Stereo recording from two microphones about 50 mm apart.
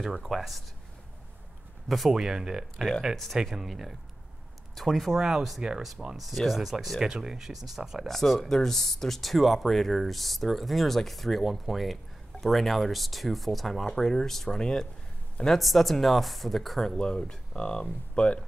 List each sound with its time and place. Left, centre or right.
0.0 s speech: centre
1.9 s speech: centre
8.1 s a man's voice: centre
16.9 s speech: centre